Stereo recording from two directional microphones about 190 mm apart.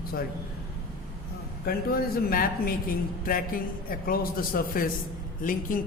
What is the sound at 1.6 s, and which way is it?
A man's voice, 50° left (ahead or behind).